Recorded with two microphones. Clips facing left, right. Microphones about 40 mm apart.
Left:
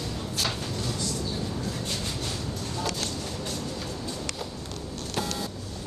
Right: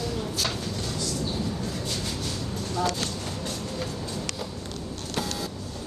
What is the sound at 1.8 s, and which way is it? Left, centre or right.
Vehicle, centre.